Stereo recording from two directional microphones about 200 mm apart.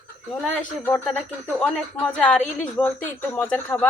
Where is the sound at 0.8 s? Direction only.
10° left (ahead or behind).